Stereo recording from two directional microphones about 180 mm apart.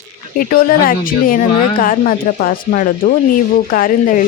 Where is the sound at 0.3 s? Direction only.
55° left (ahead or behind).